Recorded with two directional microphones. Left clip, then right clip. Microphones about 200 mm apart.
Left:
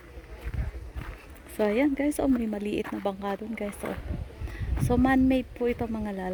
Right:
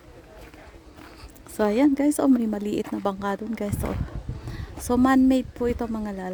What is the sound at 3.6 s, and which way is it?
A woman's voice, 10° right (ahead or behind).